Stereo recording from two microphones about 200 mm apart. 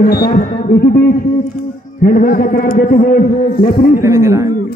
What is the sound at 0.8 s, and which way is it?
A man's voice, 50° left (ahead or behind).